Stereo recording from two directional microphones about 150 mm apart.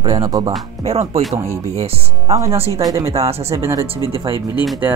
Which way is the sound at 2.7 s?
20° right (ahead or behind).